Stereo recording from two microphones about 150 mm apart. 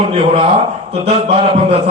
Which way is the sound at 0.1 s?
45° right (ahead or behind).